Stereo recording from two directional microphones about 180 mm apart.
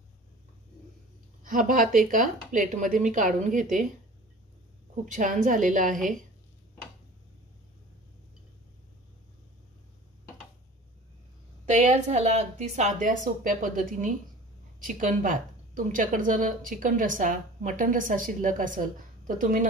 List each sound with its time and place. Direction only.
1.4 s a woman's voice: 50° right (ahead or behind)
5.0 s a woman's voice: 45° right (ahead or behind)
11.6 s a woman's voice: 40° right (ahead or behind)